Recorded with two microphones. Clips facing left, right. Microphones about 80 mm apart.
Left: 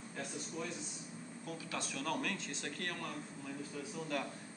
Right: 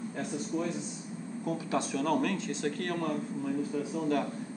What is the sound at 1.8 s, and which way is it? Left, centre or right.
A man's voice, centre.